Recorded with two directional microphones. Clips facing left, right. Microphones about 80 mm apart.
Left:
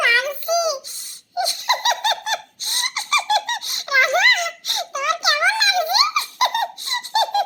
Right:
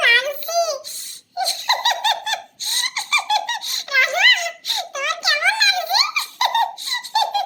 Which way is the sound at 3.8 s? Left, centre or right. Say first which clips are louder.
Left 1 dB; left.